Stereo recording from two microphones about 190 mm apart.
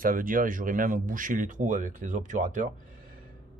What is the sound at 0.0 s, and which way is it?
Speech, 45° right (ahead or behind).